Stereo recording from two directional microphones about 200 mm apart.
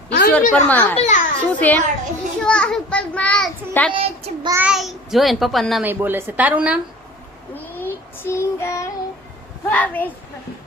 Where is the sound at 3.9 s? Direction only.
25° right (ahead or behind).